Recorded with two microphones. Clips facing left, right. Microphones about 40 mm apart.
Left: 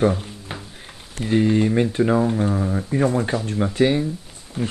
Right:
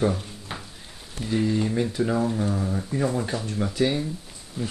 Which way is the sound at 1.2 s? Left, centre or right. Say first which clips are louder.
Left 6 dB; left.